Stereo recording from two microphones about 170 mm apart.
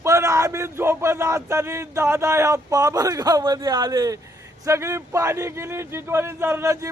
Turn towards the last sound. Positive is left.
turn(degrees=-15)  # may be behind; listen again after turning